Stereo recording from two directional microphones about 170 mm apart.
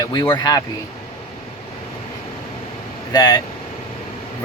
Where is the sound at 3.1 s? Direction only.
20° left (ahead or behind).